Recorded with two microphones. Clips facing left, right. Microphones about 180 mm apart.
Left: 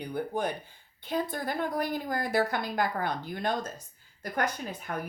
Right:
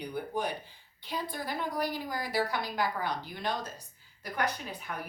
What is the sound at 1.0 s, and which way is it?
A woman's voice, 50° left (ahead or behind).